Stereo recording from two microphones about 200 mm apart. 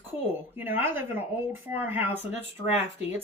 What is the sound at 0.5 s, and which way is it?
Speech, 10° right (ahead or behind).